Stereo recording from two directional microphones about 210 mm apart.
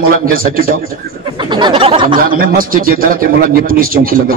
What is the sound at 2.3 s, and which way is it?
Speech, 45° right (ahead or behind).